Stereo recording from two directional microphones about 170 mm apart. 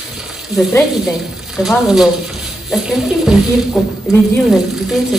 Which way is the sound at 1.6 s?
Centre (ahead or behind).